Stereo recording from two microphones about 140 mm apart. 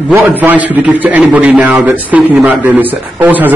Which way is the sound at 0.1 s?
15° right (ahead or behind).